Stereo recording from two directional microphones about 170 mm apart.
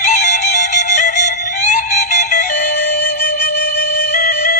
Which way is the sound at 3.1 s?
70° left (ahead or behind).